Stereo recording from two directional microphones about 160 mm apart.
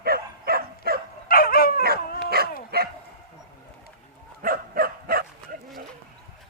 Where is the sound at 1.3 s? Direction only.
65° left (ahead or behind).